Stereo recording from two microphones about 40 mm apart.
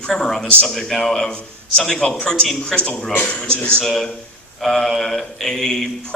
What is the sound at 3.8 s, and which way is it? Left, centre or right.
Speech, centre.